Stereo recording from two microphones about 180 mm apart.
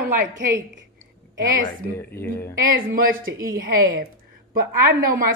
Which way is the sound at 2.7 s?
50° right (ahead or behind).